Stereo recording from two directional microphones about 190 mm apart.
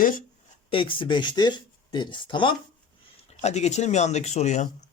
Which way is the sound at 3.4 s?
35° left (ahead or behind).